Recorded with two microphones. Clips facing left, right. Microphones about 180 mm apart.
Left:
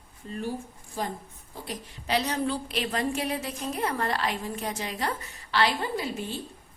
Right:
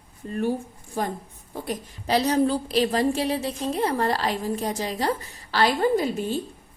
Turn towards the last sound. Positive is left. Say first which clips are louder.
# right 8 dB
turn(degrees=-45)  # may be behind; listen again after turning